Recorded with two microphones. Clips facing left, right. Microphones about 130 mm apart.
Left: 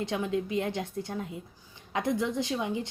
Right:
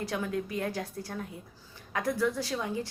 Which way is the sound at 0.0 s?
20° left (ahead or behind).